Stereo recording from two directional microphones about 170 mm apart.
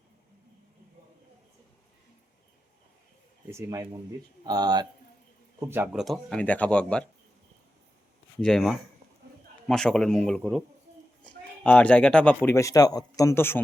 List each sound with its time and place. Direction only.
3.5 s speech: 15° right (ahead or behind)
5.5 s speech: 15° right (ahead or behind)
5.9 s speech: centre (ahead or behind)
8.4 s speech: 5° left (ahead or behind)
11.6 s speech: 10° left (ahead or behind)